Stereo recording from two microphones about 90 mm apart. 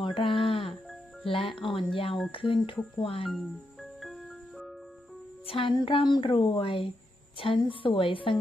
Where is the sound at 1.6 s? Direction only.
70° left (ahead or behind).